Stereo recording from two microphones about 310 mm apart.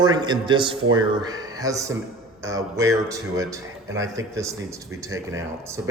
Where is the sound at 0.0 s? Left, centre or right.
Centre.